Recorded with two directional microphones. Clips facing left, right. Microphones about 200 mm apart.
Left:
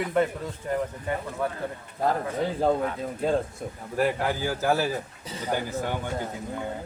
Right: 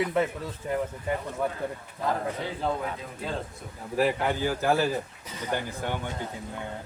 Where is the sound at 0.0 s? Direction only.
Centre (ahead or behind).